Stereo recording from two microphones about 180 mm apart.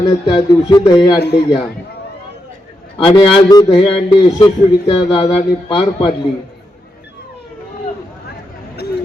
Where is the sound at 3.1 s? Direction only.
25° left (ahead or behind).